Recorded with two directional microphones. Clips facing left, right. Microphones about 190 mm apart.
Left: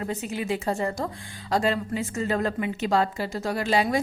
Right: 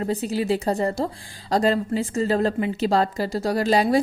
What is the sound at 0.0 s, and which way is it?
Speech, 35° right (ahead or behind).